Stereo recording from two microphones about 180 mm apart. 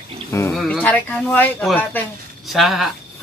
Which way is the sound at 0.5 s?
Centre (ahead or behind).